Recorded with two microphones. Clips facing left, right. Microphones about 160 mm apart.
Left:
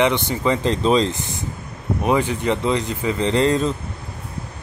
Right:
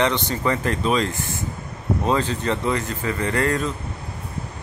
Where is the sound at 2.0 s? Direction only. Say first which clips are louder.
Left 3 dB; 15° left (ahead or behind).